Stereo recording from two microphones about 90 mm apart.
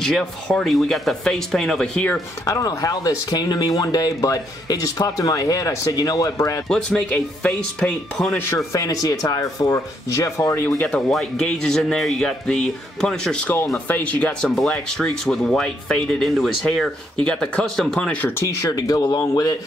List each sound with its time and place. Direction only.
0.0 s speech: 5° left (ahead or behind)
2.4 s speech: 40° left (ahead or behind)
6.7 s speech: 10° left (ahead or behind)
8.7 s speech: 40° left (ahead or behind)
10.8 s speech: 10° left (ahead or behind)
18.1 s speech: 20° left (ahead or behind)
18.4 s speech: 40° left (ahead or behind)